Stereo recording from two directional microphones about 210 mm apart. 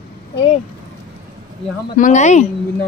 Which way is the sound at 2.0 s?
35° left (ahead or behind).